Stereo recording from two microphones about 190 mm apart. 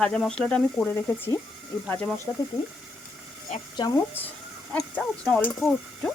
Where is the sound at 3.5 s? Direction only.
35° left (ahead or behind).